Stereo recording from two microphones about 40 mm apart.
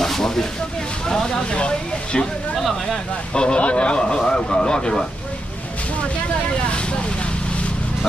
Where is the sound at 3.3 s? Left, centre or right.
Left.